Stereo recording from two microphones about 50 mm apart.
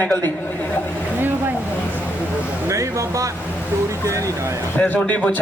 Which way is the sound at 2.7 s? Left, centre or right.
Right.